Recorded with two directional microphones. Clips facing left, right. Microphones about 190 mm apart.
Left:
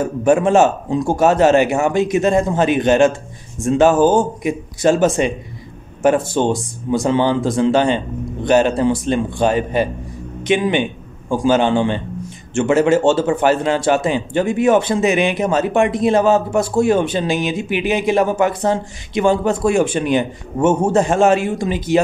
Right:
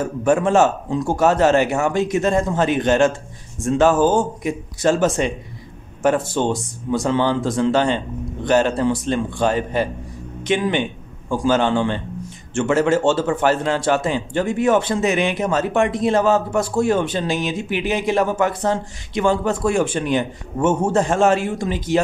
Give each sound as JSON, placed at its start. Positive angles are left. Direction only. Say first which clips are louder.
{"t": 0.0, "sound": "a man's voice", "louder": "left 3 dB", "side_deg": 15}